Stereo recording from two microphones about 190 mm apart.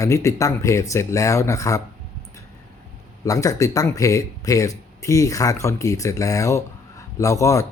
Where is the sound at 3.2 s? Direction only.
15° left (ahead or behind).